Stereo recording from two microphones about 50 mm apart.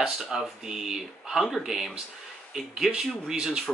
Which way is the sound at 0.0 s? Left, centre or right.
Centre.